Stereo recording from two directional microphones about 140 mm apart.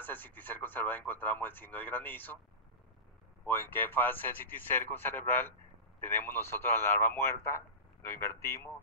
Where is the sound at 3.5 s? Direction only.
15° left (ahead or behind).